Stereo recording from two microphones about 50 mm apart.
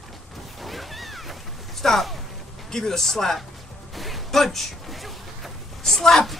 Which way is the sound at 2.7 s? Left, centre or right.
Centre.